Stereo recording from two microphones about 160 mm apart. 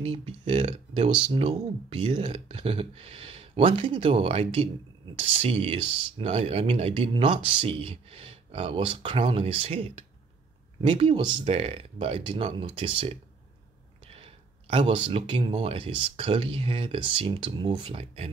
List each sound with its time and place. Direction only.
0.0 s speech: 35° right (ahead or behind)